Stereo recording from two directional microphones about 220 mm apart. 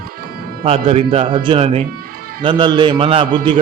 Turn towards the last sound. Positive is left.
turn(degrees=-25)  # may be behind; listen again after turning